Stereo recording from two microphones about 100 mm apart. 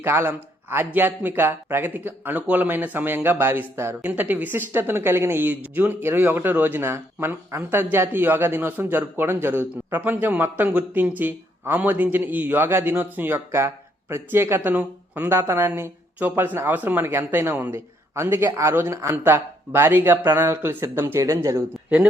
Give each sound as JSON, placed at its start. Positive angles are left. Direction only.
{"t": 0.0, "sound": "speech", "side_deg": -25}